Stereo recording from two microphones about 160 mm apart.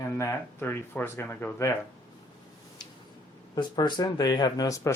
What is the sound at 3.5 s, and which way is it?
Speech, 25° left (ahead or behind).